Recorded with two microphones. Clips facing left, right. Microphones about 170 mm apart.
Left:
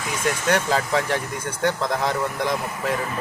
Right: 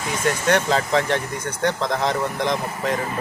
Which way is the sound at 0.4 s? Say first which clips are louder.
Right 2 dB; 5° left (ahead or behind).